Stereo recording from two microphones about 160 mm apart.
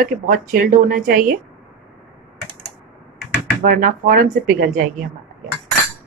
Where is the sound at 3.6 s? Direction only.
55° right (ahead or behind).